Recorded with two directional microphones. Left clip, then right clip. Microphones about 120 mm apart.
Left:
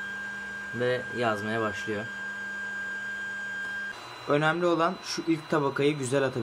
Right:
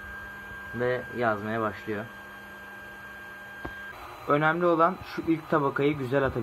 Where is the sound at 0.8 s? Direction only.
5° right (ahead or behind).